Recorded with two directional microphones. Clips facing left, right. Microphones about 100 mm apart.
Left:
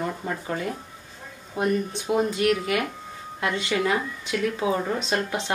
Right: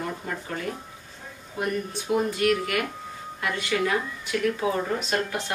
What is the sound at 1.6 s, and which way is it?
Speech, 20° left (ahead or behind).